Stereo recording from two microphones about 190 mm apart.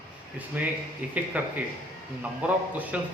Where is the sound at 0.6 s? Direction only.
10° right (ahead or behind).